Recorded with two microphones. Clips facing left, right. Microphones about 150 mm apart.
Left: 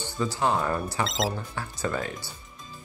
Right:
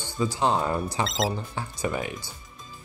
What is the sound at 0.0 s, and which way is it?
Speech, 15° right (ahead or behind).